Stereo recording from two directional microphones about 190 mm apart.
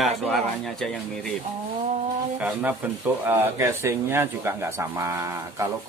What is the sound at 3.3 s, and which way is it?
Speech, 10° right (ahead or behind).